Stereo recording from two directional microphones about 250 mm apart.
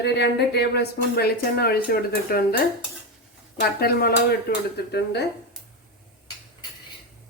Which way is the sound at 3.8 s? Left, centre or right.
Left.